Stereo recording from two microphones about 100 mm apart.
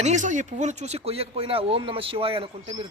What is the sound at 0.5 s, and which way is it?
A man's voice, 90° right.